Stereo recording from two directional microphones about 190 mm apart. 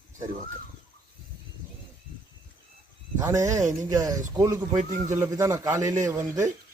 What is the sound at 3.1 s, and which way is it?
A man's voice, 15° right (ahead or behind).